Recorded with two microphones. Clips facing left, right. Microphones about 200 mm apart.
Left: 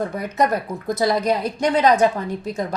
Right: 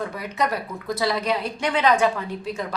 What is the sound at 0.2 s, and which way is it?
A woman's voice, 45° left (ahead or behind).